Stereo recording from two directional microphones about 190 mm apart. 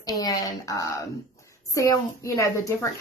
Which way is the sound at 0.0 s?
20° left (ahead or behind).